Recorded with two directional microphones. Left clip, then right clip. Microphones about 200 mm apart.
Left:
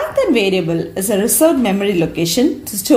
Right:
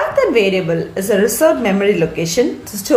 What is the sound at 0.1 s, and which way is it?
A woman's voice, 35° left (ahead or behind).